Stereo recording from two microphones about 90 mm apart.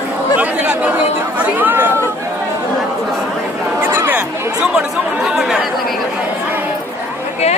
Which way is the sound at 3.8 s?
20° right (ahead or behind).